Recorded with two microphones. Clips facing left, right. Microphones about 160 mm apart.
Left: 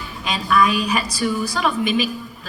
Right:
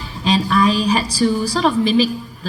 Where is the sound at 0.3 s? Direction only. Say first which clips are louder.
Right 3 dB; 35° right (ahead or behind).